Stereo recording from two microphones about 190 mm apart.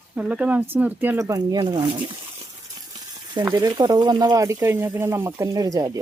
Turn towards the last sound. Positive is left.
turn(degrees=-20)  # may be behind; listen again after turning